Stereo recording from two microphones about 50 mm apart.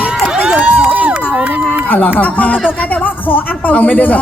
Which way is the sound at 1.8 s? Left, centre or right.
Left.